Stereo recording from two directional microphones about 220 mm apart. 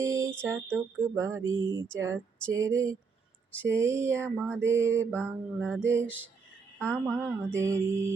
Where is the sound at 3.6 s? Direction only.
10° right (ahead or behind).